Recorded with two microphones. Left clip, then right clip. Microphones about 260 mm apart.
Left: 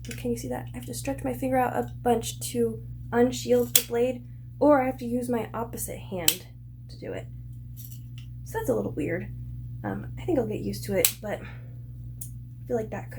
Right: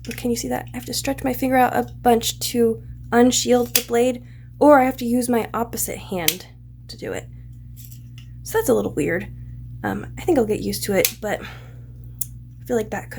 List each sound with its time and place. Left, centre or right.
0.2 s speech: right
8.4 s speech: right
12.6 s speech: right